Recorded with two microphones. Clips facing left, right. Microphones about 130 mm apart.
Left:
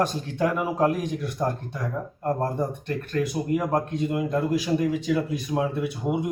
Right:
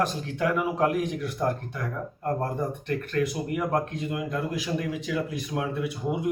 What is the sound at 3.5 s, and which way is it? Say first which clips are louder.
Speech: left 3 dB; 30° left (ahead or behind).